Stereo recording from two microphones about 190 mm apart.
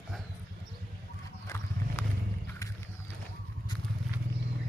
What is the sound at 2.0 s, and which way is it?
Roaring cats, 10° left (ahead or behind).